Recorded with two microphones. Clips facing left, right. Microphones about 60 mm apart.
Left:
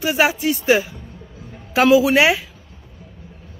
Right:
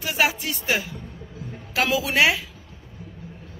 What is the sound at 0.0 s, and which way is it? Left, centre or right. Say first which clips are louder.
Speech: left 6 dB; centre.